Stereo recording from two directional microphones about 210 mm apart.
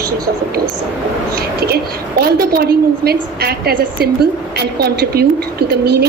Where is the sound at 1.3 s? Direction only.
50° right (ahead or behind).